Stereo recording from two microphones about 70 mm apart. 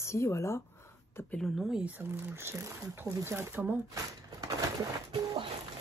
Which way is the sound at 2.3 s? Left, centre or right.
Right.